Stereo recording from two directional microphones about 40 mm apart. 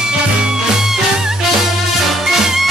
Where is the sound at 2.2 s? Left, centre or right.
Centre.